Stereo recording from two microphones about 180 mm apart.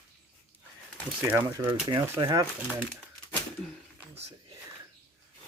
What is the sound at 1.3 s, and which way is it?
Speech, 15° right (ahead or behind).